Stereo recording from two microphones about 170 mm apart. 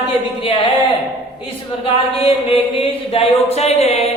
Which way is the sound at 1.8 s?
35° left (ahead or behind).